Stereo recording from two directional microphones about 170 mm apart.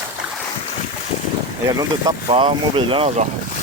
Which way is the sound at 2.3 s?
30° right (ahead or behind).